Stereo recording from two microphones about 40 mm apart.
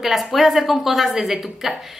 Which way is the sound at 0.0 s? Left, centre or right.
Centre.